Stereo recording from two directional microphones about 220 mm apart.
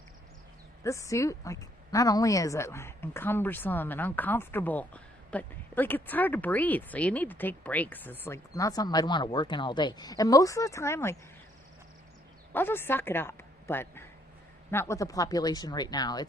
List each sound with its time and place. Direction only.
0.9 s a woman's voice: 15° left (ahead or behind)
12.5 s a woman's voice: 10° left (ahead or behind)